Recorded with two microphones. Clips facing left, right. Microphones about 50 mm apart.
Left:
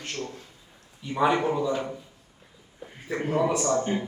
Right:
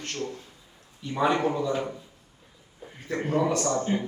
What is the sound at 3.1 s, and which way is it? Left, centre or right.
Speech, centre.